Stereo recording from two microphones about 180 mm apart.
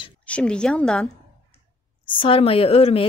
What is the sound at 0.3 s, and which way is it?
Speech, 5° left (ahead or behind).